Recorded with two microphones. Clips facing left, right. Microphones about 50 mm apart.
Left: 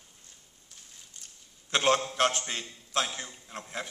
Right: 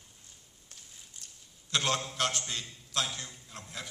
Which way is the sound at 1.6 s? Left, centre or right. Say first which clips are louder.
Left 6 dB; left.